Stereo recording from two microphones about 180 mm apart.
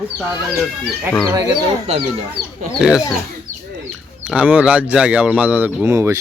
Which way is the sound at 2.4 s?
60° right (ahead or behind).